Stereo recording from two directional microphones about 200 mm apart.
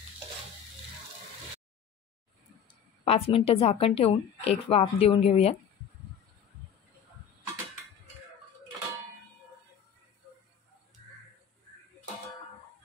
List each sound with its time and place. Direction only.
3.1 s a woman's voice: 30° left (ahead or behind)